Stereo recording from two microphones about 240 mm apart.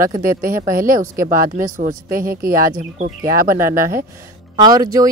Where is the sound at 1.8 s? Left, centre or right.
Right.